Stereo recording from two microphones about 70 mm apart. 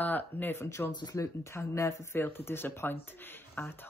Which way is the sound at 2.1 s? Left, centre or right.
Left.